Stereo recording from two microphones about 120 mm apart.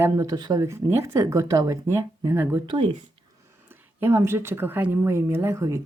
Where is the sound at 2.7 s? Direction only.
45° right (ahead or behind).